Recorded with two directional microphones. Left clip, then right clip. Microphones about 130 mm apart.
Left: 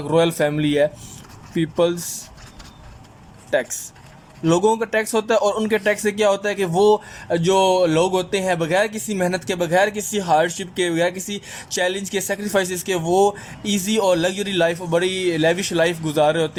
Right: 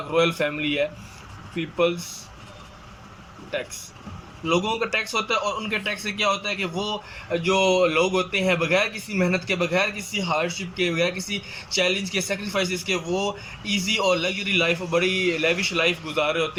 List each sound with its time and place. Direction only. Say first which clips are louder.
0.1 s a man's voice: left 4 dB; 50° left (ahead or behind)
4.4 s a man's voice: left 6 dB; 65° left (ahead or behind)